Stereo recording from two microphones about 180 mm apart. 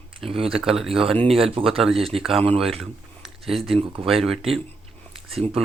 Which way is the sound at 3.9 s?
30° right (ahead or behind).